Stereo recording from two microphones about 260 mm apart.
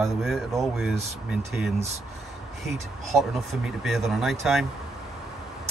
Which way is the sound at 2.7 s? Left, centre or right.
Centre.